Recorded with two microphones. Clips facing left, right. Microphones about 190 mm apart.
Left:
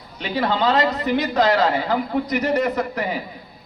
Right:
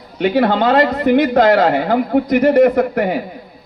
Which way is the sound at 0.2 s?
55° right (ahead or behind).